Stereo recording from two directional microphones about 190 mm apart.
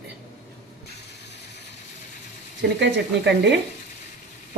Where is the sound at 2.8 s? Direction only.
65° right (ahead or behind).